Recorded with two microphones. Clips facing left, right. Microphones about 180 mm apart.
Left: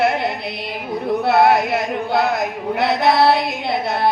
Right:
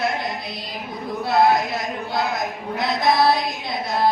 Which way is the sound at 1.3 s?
65° left (ahead or behind).